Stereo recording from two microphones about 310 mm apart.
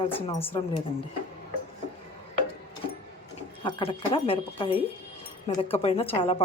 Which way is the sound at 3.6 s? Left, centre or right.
Centre.